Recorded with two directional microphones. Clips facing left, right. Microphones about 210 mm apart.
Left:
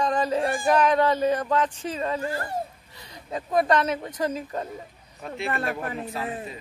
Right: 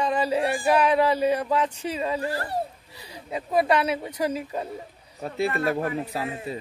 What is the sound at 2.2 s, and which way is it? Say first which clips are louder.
Speech: right 1 dB; 35° right (ahead or behind).